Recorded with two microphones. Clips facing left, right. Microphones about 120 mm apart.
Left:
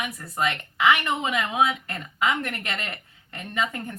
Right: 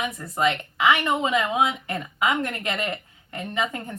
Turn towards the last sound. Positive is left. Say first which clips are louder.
# right 1 dB
turn(degrees=-25)  # may be behind; listen again after turning